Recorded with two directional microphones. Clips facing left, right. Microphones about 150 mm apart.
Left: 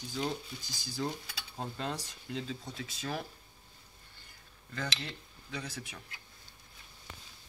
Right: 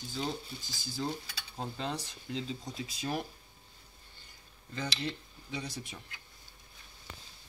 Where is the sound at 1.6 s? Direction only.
5° left (ahead or behind).